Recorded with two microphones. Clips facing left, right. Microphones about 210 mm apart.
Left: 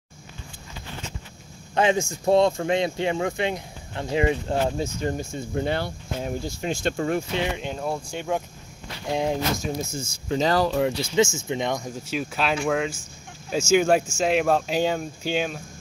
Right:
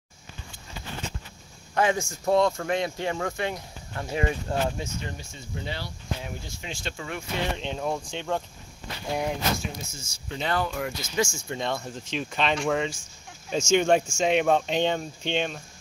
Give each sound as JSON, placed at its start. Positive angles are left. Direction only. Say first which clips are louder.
{"t": 1.8, "sound": "speech", "louder": "left 3 dB", "side_deg": 20}
{"t": 4.7, "sound": "speech", "louder": "left 8 dB", "side_deg": 45}
{"t": 7.5, "sound": "speech", "louder": "left 1 dB", "side_deg": 5}
{"t": 9.1, "sound": "speech", "louder": "left 4 dB", "side_deg": 25}
{"t": 9.6, "sound": "speech", "louder": "left 8 dB", "side_deg": 50}